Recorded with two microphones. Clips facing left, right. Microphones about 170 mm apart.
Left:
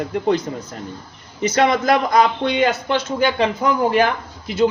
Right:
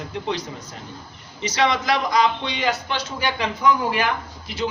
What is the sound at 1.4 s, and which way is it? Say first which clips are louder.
A man's voice: left 5 dB; 50° left (ahead or behind).